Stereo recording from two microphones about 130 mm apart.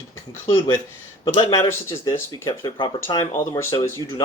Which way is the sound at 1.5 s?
25° left (ahead or behind).